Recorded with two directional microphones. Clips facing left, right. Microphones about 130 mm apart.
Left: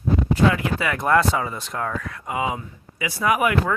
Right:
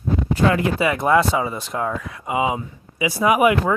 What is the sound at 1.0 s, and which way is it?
Speech, 10° right (ahead or behind).